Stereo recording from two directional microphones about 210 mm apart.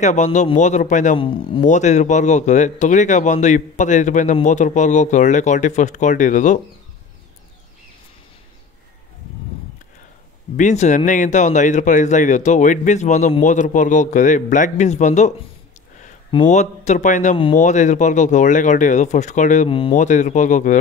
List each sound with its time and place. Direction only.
0.0 s speech: 35° left (ahead or behind)
1.2 s speech: 25° left (ahead or behind)
10.5 s speech: 35° left (ahead or behind)
16.4 s speech: 35° left (ahead or behind)